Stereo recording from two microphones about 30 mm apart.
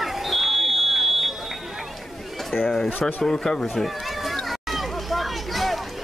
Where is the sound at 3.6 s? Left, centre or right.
Centre.